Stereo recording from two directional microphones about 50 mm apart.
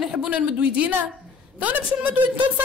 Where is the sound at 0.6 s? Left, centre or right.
Right.